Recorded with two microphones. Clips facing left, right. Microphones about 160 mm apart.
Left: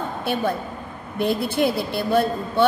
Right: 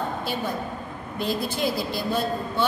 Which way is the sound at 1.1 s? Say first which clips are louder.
Left 5 dB; 60° left (ahead or behind).